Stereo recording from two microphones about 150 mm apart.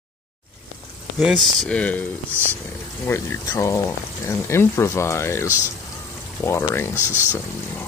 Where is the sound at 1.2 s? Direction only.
Centre (ahead or behind).